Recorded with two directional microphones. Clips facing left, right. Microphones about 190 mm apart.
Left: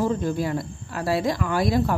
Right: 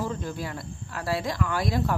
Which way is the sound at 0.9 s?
15° left (ahead or behind).